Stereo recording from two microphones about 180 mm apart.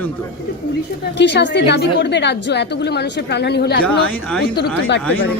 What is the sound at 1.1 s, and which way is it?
A woman's voice, 75° left (ahead or behind).